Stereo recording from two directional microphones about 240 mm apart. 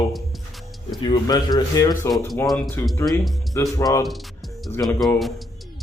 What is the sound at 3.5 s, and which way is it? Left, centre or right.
Speech, centre.